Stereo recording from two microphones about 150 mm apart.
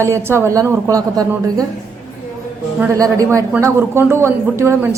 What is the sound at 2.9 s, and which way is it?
Speech, 20° right (ahead or behind).